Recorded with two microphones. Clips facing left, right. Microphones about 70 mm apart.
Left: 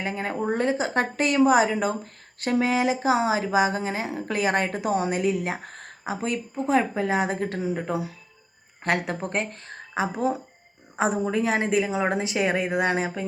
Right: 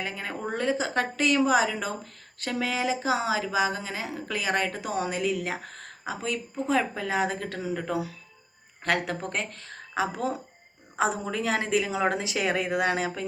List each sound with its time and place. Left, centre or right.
0.0 s speech: left
12.5 s speech: centre
12.8 s speech: left